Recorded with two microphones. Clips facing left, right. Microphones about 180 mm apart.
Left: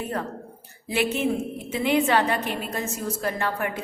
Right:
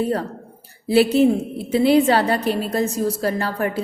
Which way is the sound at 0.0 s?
35° right (ahead or behind).